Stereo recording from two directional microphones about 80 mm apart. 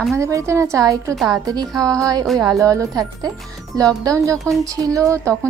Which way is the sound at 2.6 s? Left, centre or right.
Right.